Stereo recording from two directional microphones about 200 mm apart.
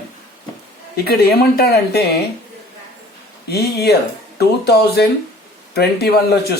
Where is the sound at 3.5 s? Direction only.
50° left (ahead or behind).